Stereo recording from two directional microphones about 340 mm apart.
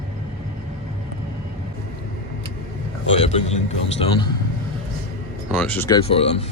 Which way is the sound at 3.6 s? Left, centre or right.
Centre.